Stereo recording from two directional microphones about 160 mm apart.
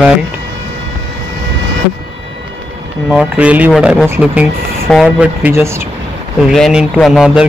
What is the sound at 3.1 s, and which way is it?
Speech, 5° right (ahead or behind).